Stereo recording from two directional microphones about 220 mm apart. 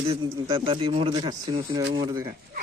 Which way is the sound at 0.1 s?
25° right (ahead or behind).